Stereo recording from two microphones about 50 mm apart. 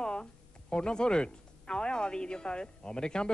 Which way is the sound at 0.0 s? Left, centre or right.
Centre.